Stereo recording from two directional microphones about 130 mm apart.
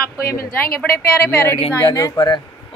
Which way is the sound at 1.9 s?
30° left (ahead or behind).